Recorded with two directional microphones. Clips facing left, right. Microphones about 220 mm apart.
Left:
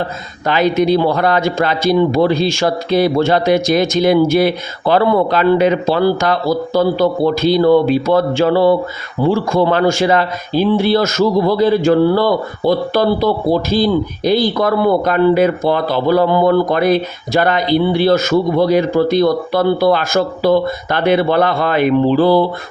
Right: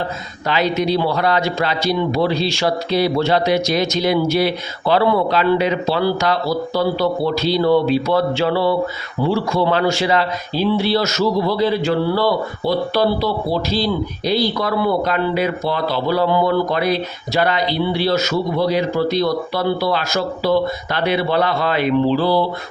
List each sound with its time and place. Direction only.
0.4 s speech: 50° left (ahead or behind)